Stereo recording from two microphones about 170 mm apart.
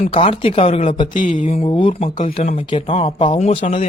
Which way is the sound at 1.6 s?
30° left (ahead or behind).